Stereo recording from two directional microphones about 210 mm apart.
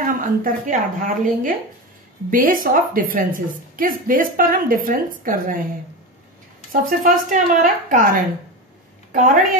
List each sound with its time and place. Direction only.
0.0 s a woman's voice: 40° right (ahead or behind)
6.7 s a woman's voice: 40° right (ahead or behind)
9.1 s a woman's voice: 40° right (ahead or behind)